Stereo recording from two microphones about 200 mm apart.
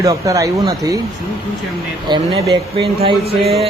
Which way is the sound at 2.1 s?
20° right (ahead or behind).